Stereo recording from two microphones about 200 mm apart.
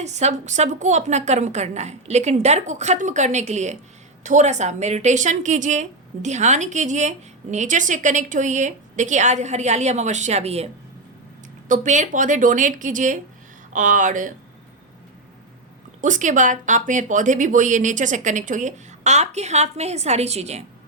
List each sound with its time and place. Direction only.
0.0 s speech: 35° right (ahead or behind)
11.7 s speech: 40° right (ahead or behind)
16.0 s speech: 40° right (ahead or behind)